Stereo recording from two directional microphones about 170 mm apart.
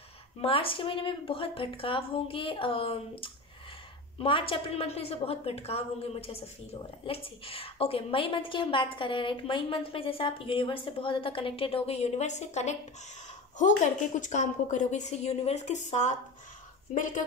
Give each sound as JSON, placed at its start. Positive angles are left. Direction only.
{"t": 0.4, "sound": "a woman's voice", "side_deg": 35}